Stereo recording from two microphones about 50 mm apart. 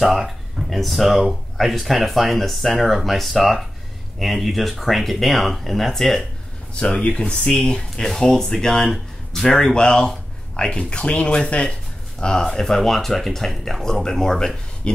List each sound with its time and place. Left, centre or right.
0.0 s speech: centre
6.7 s speech: left